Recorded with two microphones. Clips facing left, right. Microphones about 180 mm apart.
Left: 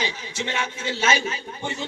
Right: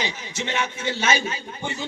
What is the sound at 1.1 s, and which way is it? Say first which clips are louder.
Speech: even; 30° right (ahead or behind).